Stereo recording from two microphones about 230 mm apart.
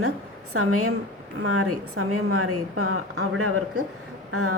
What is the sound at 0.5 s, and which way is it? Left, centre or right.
A woman's voice, right.